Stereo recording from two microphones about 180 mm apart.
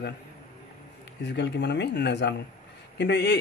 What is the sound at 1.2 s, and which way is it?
Speech, 75° left (ahead or behind).